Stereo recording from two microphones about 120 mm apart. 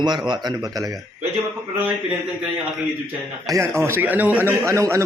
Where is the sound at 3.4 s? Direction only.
30° right (ahead or behind).